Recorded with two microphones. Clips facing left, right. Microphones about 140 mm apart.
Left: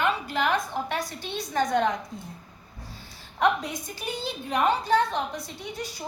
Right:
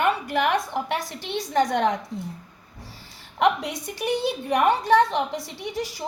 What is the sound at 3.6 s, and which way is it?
A woman's voice, 75° right (ahead or behind).